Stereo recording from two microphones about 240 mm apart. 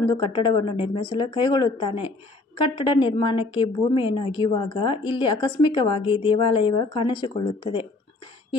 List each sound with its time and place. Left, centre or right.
0.2 s speech: centre